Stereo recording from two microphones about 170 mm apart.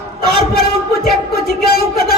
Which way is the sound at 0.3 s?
65° left (ahead or behind).